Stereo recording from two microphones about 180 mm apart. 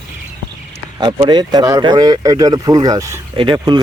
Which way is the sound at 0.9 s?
25° right (ahead or behind).